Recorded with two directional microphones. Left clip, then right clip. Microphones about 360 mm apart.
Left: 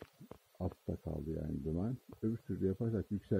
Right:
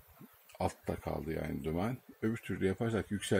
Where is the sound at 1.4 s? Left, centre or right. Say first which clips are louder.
Right 5 dB; centre.